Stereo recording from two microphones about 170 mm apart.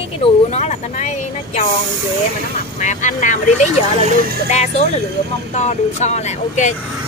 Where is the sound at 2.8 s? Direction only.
45° left (ahead or behind).